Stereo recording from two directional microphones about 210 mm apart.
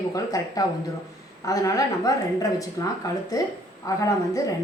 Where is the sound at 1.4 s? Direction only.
15° left (ahead or behind).